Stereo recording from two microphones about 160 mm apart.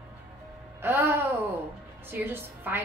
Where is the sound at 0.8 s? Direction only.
15° right (ahead or behind).